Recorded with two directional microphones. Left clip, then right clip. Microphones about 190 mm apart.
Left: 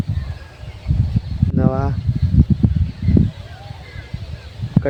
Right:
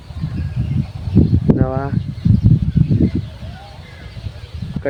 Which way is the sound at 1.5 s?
5° left (ahead or behind).